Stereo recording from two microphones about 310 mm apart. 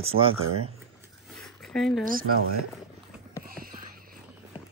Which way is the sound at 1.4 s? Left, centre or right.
Centre.